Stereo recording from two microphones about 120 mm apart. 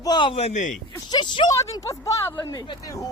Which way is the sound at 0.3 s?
75° left (ahead or behind).